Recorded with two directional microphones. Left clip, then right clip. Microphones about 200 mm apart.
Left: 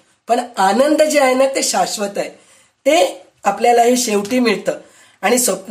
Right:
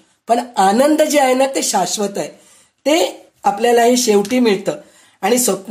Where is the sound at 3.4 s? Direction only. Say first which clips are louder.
Even; 30° right (ahead or behind).